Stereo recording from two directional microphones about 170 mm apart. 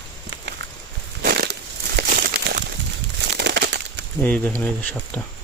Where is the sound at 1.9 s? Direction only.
70° right (ahead or behind).